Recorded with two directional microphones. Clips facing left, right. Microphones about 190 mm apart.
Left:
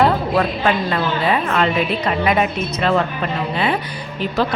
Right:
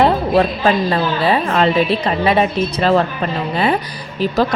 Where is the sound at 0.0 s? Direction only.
30° right (ahead or behind).